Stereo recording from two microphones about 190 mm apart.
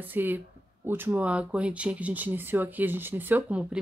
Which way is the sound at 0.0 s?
10° right (ahead or behind).